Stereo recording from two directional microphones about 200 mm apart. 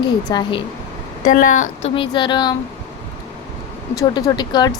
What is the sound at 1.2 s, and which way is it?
Speech, 40° left (ahead or behind).